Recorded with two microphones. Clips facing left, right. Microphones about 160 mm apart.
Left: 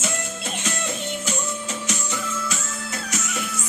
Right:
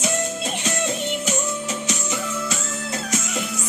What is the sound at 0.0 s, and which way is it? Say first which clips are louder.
Music: right 5 dB; 15° right (ahead or behind).